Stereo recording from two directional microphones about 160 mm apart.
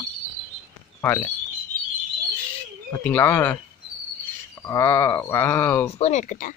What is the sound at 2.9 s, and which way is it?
Speech, 15° left (ahead or behind).